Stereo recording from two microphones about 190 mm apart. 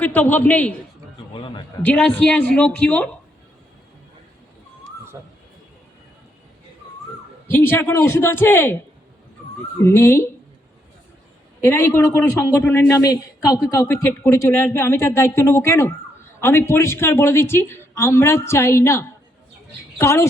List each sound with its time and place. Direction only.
0.0 s a man's voice: 10° left (ahead or behind)
1.3 s a man's voice: 25° left (ahead or behind)
1.8 s a man's voice: 10° left (ahead or behind)
7.5 s a man's voice: 10° left (ahead or behind)
9.8 s a man's voice: 15° left (ahead or behind)
11.6 s a man's voice: 10° left (ahead or behind)